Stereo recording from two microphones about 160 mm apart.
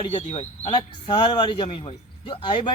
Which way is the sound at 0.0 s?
35° left (ahead or behind).